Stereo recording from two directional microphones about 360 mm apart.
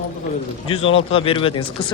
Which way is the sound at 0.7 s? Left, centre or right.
Centre.